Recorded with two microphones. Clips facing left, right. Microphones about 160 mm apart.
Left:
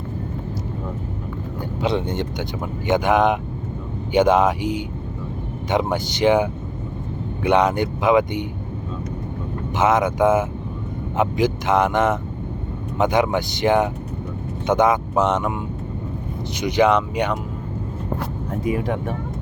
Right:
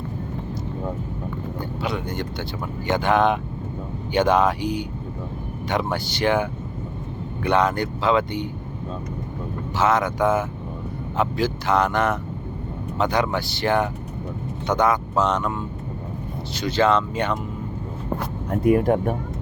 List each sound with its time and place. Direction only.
1.8 s speech: 25° left (ahead or behind)
9.7 s speech: 20° left (ahead or behind)
16.6 s speech: 15° left (ahead or behind)
18.6 s speech: 50° right (ahead or behind)